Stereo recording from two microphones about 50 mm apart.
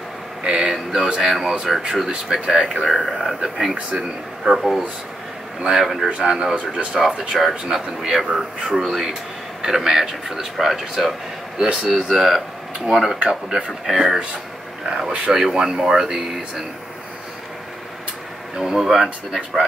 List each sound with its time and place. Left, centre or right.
0.4 s a sound: centre
0.9 s speech: centre
2.9 s speech: centre
3.9 s speech: centre
4.5 s speech: centre
5.6 s speech: centre
7.0 s speech: centre
11.5 s speech: centre
13.3 s speech: centre
18.6 s speech: centre